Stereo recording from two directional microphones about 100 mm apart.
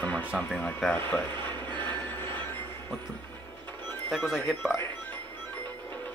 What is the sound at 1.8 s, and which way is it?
Train, 15° left (ahead or behind).